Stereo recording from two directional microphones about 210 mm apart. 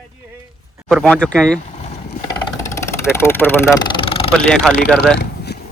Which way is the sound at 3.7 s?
25° left (ahead or behind).